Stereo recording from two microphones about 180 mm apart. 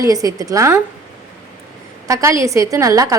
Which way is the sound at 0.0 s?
20° right (ahead or behind).